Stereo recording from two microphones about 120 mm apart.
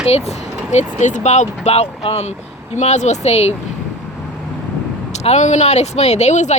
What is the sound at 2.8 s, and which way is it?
Speech, 70° left (ahead or behind).